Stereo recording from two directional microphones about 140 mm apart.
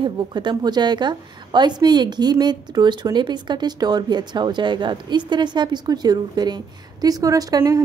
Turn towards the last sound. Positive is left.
turn(degrees=-25)  # may be behind; listen again after turning